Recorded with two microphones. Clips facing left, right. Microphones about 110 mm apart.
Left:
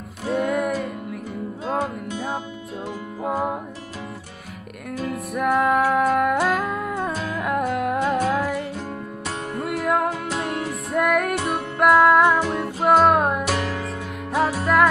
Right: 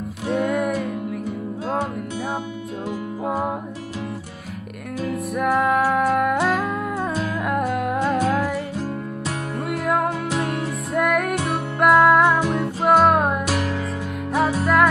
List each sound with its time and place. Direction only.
0.3 s music: centre (ahead or behind)
3.3 s music: centre (ahead or behind)
5.1 s music: centre (ahead or behind)
9.6 s music: centre (ahead or behind)